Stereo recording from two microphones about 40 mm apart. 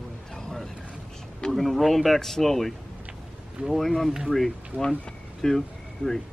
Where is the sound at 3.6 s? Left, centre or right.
Right.